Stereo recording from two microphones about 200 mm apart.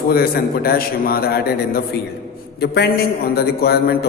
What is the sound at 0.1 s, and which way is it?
Speech, 50° left (ahead or behind).